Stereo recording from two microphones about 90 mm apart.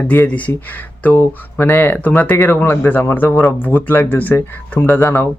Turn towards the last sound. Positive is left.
turn(degrees=25)  # may be behind; listen again after turning